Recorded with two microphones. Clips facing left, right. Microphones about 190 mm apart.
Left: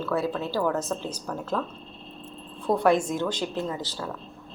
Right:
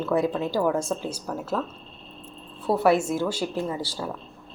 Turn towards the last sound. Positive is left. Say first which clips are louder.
# right 2 dB
turn(degrees=-10)  # may be behind; listen again after turning